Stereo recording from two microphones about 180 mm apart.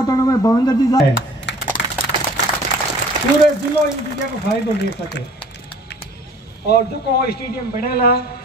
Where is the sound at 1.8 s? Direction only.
70° left (ahead or behind).